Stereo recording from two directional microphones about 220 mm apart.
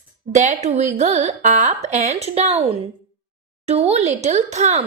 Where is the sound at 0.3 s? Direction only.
30° right (ahead or behind).